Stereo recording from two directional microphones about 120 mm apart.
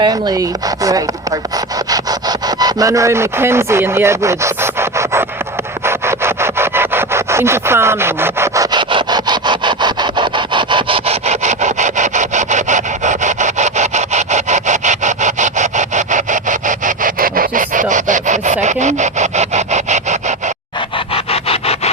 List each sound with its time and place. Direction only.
0.0 s speech: 35° right (ahead or behind)
2.6 s speech: 30° right (ahead or behind)
5.8 s sawing: 20° right (ahead or behind)
8.7 s sawing: 40° right (ahead or behind); by 16.9 s 90° right
17.5 s wood: 90° right; by 20.1 s 75° right (ahead or behind)
21.2 s rub: 55° left (ahead or behind)